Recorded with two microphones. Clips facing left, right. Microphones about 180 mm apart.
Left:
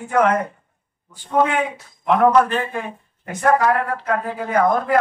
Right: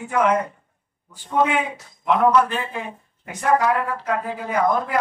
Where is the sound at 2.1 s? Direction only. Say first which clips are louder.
Left 3 dB; 50° left (ahead or behind).